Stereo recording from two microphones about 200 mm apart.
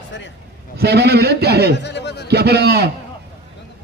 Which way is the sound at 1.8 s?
60° left (ahead or behind).